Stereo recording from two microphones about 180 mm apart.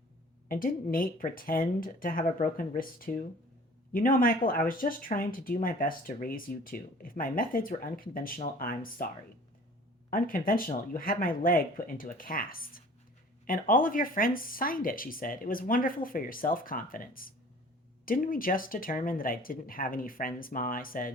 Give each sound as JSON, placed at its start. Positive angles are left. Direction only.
{"t": 0.4, "sound": "speech", "side_deg": 50}
{"t": 10.1, "sound": "speech", "side_deg": 50}